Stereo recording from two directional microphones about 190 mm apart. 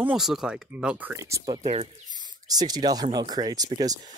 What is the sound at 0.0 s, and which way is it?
Speech, 5° right (ahead or behind).